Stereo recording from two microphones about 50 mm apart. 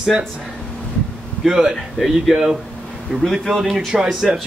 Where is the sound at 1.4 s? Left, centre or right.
Centre.